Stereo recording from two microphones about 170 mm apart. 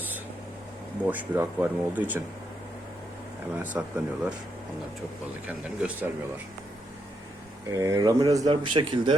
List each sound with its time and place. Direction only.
1.1 s speech: 10° right (ahead or behind)
3.5 s speech: 10° right (ahead or behind)
5.5 s speech: 10° right (ahead or behind)
7.7 s speech: 20° right (ahead or behind)